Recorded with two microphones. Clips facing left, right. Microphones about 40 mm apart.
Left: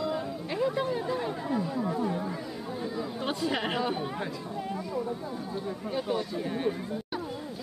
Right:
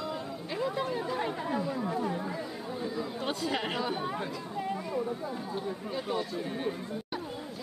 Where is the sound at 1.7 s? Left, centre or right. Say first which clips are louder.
Left 2 dB; centre.